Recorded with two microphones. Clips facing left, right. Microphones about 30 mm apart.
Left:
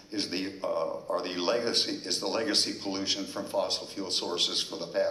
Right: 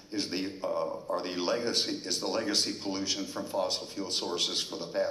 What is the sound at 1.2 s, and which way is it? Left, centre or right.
A man's voice, left.